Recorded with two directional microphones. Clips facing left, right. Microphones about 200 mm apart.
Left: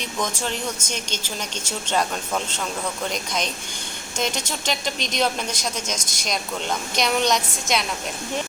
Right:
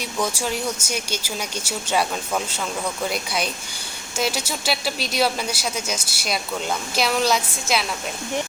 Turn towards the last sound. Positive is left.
turn(degrees=-5)  # may be behind; listen again after turning